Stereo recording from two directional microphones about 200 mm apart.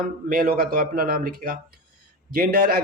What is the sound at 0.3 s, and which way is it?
A man's voice, 45° right (ahead or behind).